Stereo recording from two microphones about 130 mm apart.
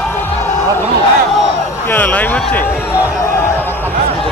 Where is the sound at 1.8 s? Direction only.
15° left (ahead or behind).